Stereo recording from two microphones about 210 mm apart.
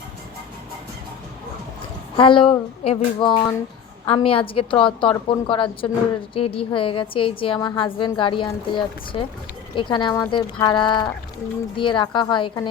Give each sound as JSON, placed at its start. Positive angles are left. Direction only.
{"t": 2.1, "sound": "a woman's voice", "side_deg": 25}